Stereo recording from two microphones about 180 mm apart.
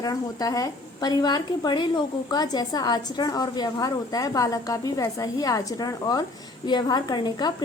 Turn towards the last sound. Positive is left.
turn(degrees=25)  # may be behind; listen again after turning